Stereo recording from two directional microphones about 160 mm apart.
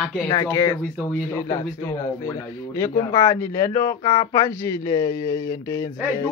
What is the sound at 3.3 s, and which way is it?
Speech, 20° left (ahead or behind).